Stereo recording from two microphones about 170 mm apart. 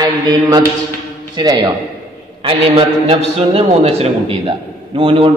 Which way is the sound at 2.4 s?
35° right (ahead or behind).